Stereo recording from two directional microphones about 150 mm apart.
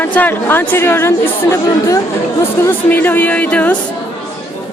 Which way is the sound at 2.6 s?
15° left (ahead or behind).